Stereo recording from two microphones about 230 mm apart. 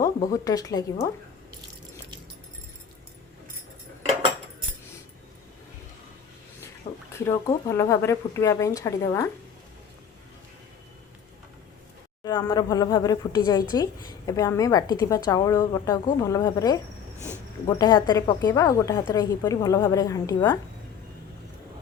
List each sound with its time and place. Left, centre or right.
0.0 s speech: centre
6.8 s a sound: left
7.3 s speech: centre
12.2 s speech: centre
17.2 s a sound: centre
17.7 s speech: centre